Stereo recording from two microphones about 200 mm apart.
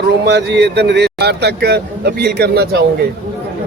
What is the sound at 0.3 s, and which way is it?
Speech, 55° right (ahead or behind).